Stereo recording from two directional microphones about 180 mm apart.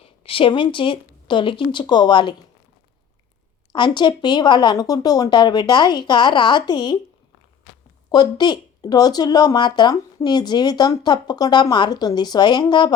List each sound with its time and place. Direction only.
0.0 s speech: 30° left (ahead or behind)
3.7 s speech: 25° left (ahead or behind)
8.1 s speech: 25° left (ahead or behind)